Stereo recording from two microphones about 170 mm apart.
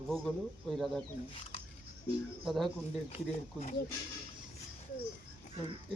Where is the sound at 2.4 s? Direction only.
Centre (ahead or behind).